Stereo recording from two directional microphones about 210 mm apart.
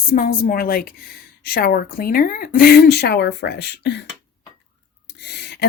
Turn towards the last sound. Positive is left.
turn(degrees=50)  # may be behind; listen again after turning